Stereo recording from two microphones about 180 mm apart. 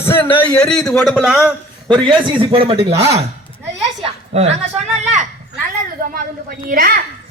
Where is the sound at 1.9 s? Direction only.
25° right (ahead or behind).